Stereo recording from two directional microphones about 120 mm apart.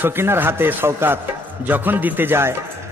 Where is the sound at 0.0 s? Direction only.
20° right (ahead or behind).